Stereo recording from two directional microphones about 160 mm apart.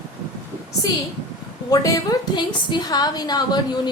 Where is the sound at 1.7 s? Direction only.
20° left (ahead or behind).